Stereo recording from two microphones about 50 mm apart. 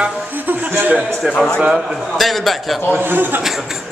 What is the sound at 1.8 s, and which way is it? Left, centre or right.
Speech, centre.